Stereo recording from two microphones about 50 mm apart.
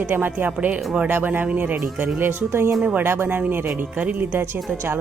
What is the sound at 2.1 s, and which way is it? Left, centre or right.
Speech, right.